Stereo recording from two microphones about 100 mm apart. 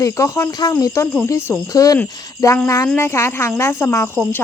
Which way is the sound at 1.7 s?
35° left (ahead or behind).